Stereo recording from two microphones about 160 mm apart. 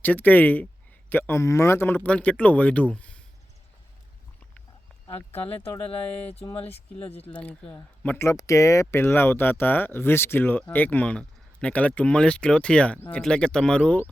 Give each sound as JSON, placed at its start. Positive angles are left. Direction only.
{"t": 0.0, "sound": "speech", "side_deg": 10}
{"t": 5.0, "sound": "speech", "side_deg": 30}
{"t": 7.3, "sound": "speech", "side_deg": 10}